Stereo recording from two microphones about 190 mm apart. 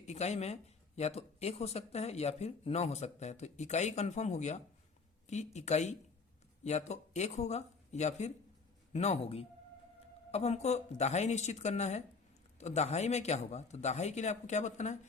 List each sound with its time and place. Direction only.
0.0 s speech: 35° left (ahead or behind)